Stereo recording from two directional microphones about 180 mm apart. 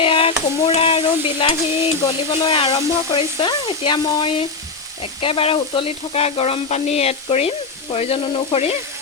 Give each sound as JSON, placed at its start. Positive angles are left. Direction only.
{"t": 0.0, "sound": "stir", "side_deg": 30}
{"t": 5.2, "sound": "frying", "side_deg": 30}